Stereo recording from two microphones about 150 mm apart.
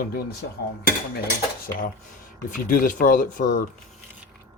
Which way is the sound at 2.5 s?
65° left (ahead or behind).